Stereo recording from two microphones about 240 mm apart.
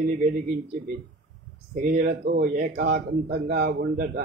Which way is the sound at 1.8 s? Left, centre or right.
Right.